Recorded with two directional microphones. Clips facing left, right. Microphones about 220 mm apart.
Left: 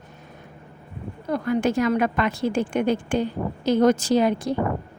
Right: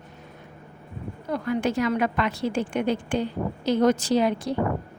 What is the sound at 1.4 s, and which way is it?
A woman's voice, 45° left (ahead or behind).